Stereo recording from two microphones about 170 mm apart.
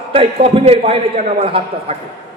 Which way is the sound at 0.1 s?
35° right (ahead or behind).